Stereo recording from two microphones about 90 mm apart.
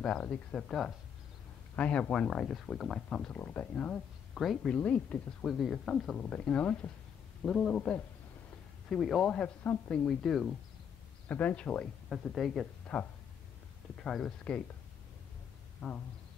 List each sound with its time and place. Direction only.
0.0 s speech: 10° left (ahead or behind)
3.3 s speech: 15° left (ahead or behind)
4.4 s speech: centre (ahead or behind)
4.7 s speech: 15° left (ahead or behind)
5.5 s speech: centre (ahead or behind)
6.1 s speech: 15° left (ahead or behind)
11.2 s speech: 15° left (ahead or behind)
12.1 s speech: centre (ahead or behind)
15.8 s speech: 10° left (ahead or behind)